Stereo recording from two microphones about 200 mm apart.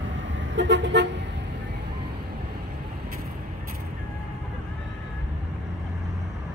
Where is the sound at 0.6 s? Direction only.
60° right (ahead or behind).